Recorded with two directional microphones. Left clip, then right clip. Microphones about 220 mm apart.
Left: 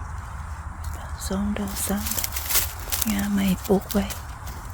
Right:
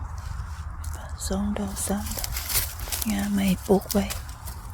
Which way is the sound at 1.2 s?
5° right (ahead or behind).